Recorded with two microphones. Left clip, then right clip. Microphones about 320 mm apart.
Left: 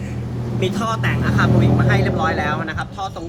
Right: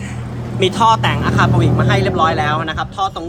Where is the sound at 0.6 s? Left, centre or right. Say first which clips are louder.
Right 10 dB; centre.